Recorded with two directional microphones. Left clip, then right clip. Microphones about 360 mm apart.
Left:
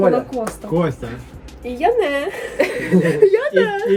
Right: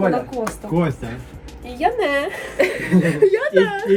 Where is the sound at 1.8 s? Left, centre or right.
Centre.